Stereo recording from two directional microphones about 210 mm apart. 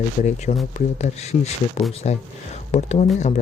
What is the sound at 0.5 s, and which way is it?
Speech, 30° left (ahead or behind).